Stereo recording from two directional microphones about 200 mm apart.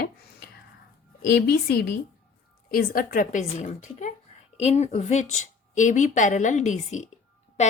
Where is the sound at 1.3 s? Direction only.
55° left (ahead or behind).